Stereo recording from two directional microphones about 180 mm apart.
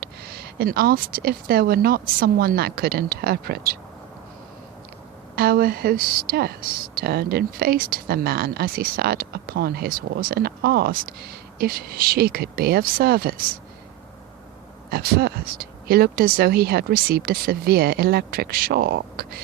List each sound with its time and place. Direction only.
0.0 s speech: 60° right (ahead or behind)
5.4 s speech: 55° right (ahead or behind)
14.8 s speech: 60° right (ahead or behind)